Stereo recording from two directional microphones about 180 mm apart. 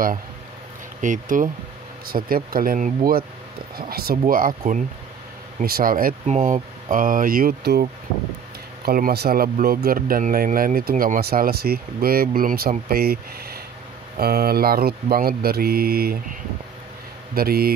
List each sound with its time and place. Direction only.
1.0 s speech: 45° right (ahead or behind)
8.8 s speech: 55° right (ahead or behind)